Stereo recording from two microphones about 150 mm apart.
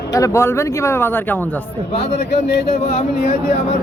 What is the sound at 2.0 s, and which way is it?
A man's voice, 45° left (ahead or behind).